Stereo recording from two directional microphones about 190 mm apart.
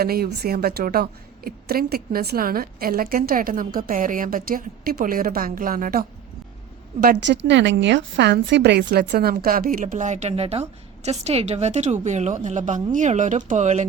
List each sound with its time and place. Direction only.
0.0 s a woman's voice: 55° right (ahead or behind)
7.2 s a woman's voice: 70° right (ahead or behind); by 13.8 s 35° right (ahead or behind)